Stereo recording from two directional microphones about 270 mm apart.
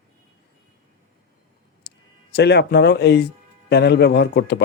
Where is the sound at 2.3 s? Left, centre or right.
Left.